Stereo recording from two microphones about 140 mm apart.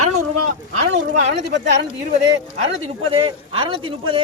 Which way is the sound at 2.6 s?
40° right (ahead or behind).